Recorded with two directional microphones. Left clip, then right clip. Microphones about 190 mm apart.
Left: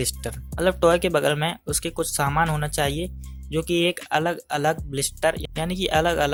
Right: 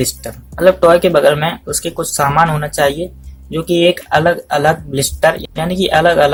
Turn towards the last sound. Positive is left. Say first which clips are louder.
# right 11 dB
turn(degrees=35)  # may be behind; listen again after turning